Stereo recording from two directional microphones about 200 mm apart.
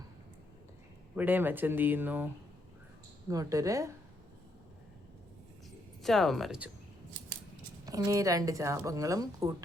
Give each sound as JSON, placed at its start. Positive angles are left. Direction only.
{"t": 1.1, "sound": "speech", "side_deg": -10}
{"t": 6.0, "sound": "speech", "side_deg": 0}
{"t": 7.9, "sound": "speech", "side_deg": -15}